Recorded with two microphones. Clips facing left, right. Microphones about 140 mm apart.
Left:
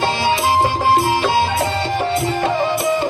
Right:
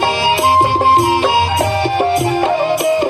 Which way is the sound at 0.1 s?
15° right (ahead or behind).